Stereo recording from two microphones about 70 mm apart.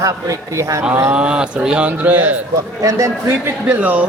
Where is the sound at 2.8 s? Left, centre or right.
Right.